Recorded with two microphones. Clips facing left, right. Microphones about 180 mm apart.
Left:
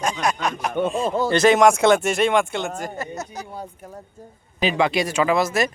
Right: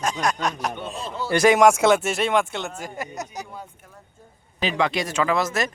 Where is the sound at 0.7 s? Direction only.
50° left (ahead or behind).